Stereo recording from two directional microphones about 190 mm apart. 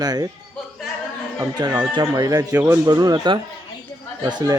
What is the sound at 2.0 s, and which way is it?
Speech, 20° right (ahead or behind).